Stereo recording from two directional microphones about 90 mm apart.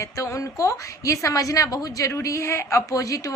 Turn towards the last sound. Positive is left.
turn(degrees=35)  # may be behind; listen again after turning